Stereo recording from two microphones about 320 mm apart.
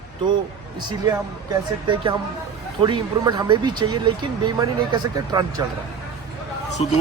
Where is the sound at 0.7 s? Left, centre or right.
Centre.